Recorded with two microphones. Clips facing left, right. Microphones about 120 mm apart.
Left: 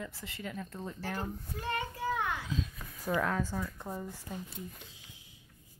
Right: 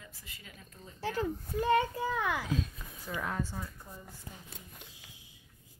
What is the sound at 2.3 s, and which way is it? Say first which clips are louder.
Speech: right 3 dB; 90° right.